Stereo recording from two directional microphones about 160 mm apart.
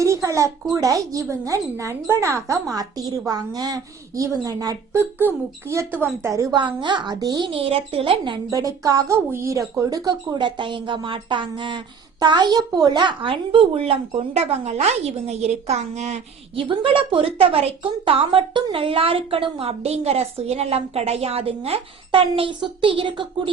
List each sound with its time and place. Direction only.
0.0 s a sound: 20° right (ahead or behind)
0.7 s speech: 20° right (ahead or behind)
8.4 s a woman's voice: 20° right (ahead or behind); by 16.6 s 45° right (ahead or behind)
16.6 s a woman's voice: 35° right (ahead or behind)